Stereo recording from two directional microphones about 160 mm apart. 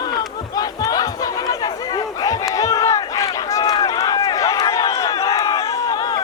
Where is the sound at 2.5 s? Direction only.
20° left (ahead or behind).